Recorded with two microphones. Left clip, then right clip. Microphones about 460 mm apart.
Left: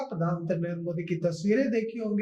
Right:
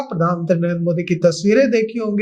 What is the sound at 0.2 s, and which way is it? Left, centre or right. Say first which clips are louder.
Speech: right 15 dB; right.